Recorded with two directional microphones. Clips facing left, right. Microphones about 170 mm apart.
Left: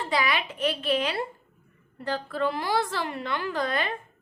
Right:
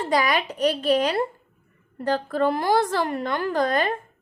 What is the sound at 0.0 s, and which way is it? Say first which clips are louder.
A woman's voice: right 5 dB; 45° right (ahead or behind).